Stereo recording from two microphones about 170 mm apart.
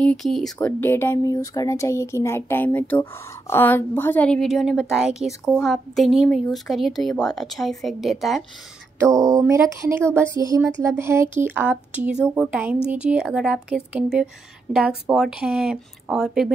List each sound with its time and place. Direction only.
0.0 s speech: 5° left (ahead or behind)
9.1 s a sound: 20° right (ahead or behind)
10.8 s a woman's voice: 15° right (ahead or behind)